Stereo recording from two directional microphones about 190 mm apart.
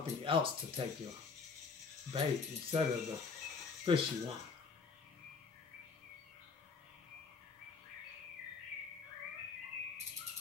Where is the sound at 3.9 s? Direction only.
25° right (ahead or behind).